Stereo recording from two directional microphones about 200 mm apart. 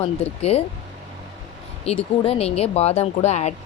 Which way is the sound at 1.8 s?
30° left (ahead or behind).